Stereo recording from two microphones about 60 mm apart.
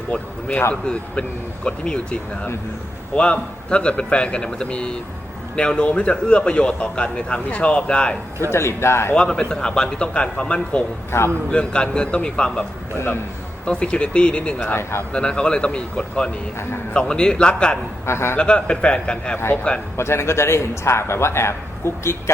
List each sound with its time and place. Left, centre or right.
0.1 s a man's voice: centre
8.5 s a man's voice: left
9.1 s a man's voice: centre
11.1 s a man's voice: left
11.5 s a man's voice: centre
13.7 s a man's voice: centre
14.8 s a man's voice: left
15.1 s a man's voice: centre
18.0 s a man's voice: left
18.3 s a man's voice: centre
20.0 s a man's voice: left